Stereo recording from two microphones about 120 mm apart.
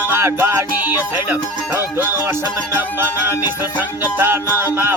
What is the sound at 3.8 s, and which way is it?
Music, 15° right (ahead or behind).